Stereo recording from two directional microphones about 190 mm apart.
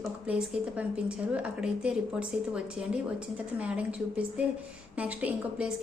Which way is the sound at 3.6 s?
5° right (ahead or behind).